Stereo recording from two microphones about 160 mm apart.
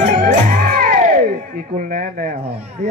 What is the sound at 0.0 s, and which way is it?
Music, 55° right (ahead or behind).